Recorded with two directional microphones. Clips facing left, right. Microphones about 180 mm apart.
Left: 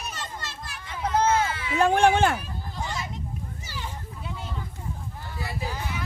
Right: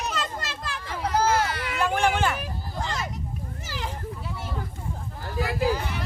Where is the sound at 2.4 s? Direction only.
90° right.